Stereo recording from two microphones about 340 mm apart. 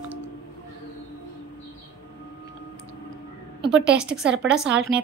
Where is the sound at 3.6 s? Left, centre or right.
Right.